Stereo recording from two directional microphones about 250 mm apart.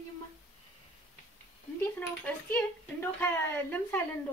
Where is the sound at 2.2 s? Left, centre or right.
Centre.